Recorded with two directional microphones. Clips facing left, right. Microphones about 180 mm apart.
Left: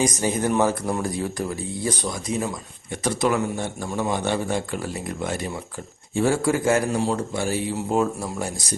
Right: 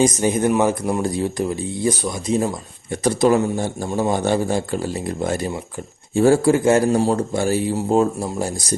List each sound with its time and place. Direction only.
0.0 s speech: 20° right (ahead or behind)
2.4 s speech: 40° right (ahead or behind)
6.9 s speech: 40° right (ahead or behind)